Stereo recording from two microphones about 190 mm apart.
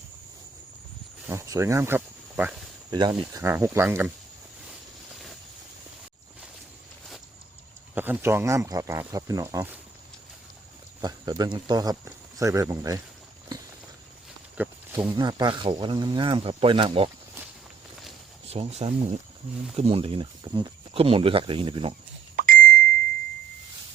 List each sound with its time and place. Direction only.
1.3 s speech: 15° right (ahead or behind)
2.9 s speech: 20° right (ahead or behind)
7.9 s speech: 10° right (ahead or behind)
11.0 s speech: 20° right (ahead or behind)
14.6 s speech: 10° right (ahead or behind)
15.1 s speech: 25° right (ahead or behind)
18.4 s speech: 35° right (ahead or behind)
22.4 s beep: 50° right (ahead or behind)